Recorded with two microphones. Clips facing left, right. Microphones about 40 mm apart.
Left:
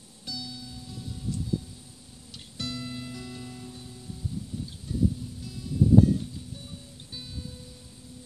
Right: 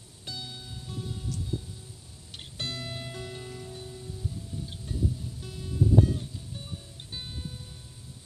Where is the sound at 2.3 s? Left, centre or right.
Right.